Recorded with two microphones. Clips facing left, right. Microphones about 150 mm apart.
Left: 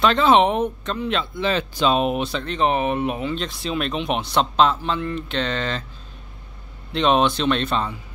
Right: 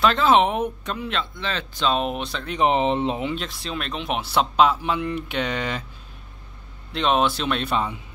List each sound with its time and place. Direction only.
0.0 s speech: centre (ahead or behind)
1.1 s speech: 10° left (ahead or behind)
2.4 s speech: 15° right (ahead or behind)
3.3 s speech: centre (ahead or behind)
6.9 s speech: centre (ahead or behind)